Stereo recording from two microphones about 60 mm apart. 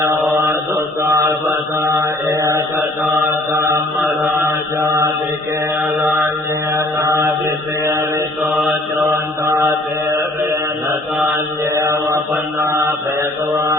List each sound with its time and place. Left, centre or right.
0.4 s mantra: right
1.8 s mantra: right
3.0 s mantra: centre
6.7 s music: right
7.4 s mantra: right
8.4 s mantra: centre
11.6 s mantra: right